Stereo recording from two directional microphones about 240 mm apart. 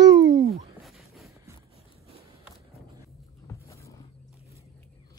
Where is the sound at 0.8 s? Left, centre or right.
Centre.